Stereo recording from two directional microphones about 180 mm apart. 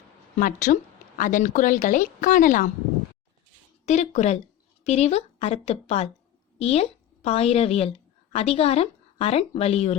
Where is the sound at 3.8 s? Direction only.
40° left (ahead or behind).